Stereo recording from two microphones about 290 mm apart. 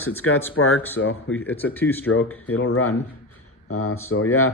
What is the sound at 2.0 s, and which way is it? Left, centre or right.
Speech, left.